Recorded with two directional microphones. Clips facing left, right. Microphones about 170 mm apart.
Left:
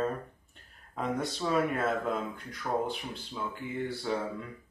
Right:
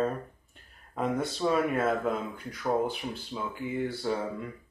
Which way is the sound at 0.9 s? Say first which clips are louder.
Right 3 dB; centre (ahead or behind).